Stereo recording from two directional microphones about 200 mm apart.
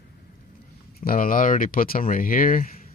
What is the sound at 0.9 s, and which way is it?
Speech, 45° left (ahead or behind).